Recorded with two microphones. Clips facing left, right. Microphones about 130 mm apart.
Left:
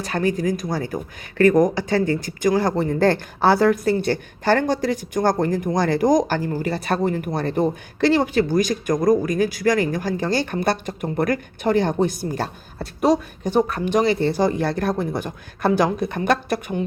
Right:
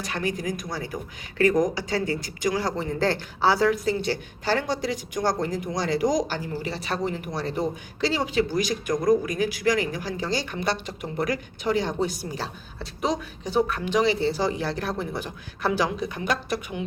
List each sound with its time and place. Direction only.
0.1 s a man's voice: 45° left (ahead or behind)